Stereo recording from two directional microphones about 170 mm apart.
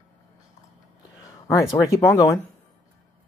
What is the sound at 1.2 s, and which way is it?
Speech, 15° left (ahead or behind).